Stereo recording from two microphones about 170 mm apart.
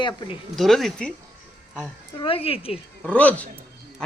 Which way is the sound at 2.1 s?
35° left (ahead or behind).